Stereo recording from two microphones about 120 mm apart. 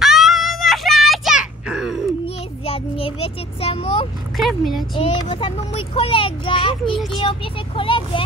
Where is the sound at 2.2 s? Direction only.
50° left (ahead or behind).